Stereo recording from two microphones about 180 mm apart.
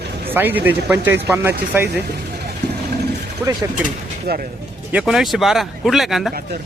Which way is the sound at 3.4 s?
10° right (ahead or behind).